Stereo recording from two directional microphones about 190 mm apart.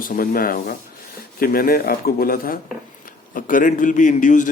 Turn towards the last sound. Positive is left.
turn(degrees=40)  # may be behind; listen again after turning